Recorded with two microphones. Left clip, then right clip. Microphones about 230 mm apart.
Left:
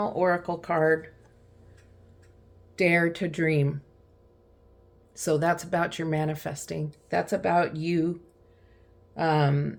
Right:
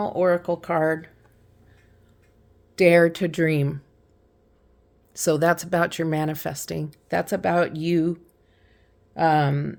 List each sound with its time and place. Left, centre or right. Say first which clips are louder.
0.0 s speech: right 4 dB; right
2.7 s speech: right 7 dB; right
5.1 s speech: right 5 dB; right
9.1 s speech: right 5 dB; right